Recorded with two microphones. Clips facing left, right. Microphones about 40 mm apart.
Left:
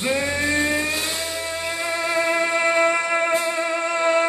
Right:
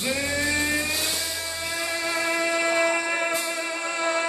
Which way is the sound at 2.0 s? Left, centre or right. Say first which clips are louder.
Left 4 dB; centre.